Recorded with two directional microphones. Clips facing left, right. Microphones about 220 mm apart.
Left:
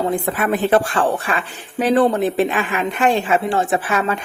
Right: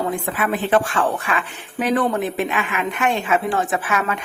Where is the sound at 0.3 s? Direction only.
40° left (ahead or behind).